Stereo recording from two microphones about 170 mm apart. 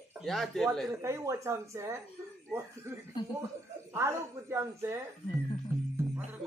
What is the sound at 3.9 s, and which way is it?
A woman's voice, 15° right (ahead or behind).